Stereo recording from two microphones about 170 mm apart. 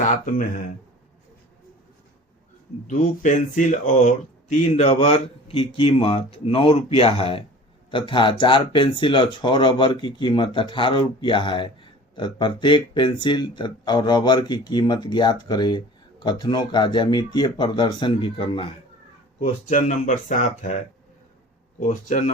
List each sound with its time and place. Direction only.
0.0 s speech: 50° left (ahead or behind)
2.8 s speech: 50° left (ahead or behind); by 18.7 s 30° left (ahead or behind)
19.4 s speech: 45° left (ahead or behind)
21.8 s speech: 45° left (ahead or behind)